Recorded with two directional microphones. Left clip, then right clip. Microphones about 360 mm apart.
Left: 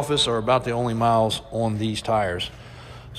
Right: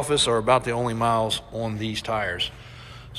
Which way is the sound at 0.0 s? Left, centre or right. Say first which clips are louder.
Right 1 dB; centre.